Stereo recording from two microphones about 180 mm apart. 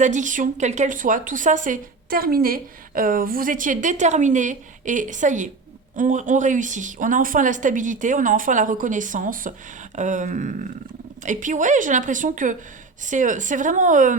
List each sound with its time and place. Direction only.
0.0 s a woman's voice: 45° right (ahead or behind)